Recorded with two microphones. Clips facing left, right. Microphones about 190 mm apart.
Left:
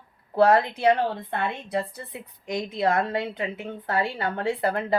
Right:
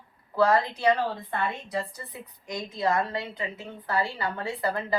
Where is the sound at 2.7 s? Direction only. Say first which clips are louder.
Left 2 dB; 65° left (ahead or behind).